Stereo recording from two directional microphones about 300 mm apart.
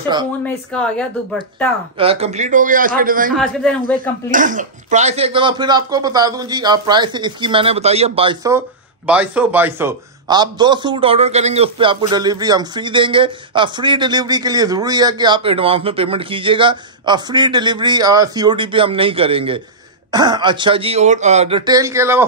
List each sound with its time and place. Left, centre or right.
0.7 s speech: centre
2.0 s a man's voice: centre